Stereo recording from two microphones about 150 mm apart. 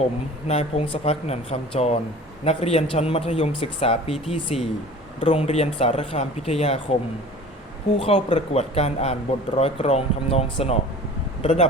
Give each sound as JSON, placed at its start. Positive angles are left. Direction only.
{"t": 0.0, "sound": "speech", "side_deg": 45}
{"t": 7.9, "sound": "speech", "side_deg": 40}